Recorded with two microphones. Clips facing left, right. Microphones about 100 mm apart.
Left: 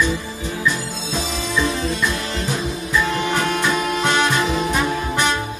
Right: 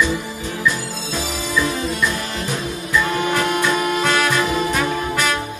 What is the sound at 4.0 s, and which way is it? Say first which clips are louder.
Music: left 2 dB; 25° left (ahead or behind).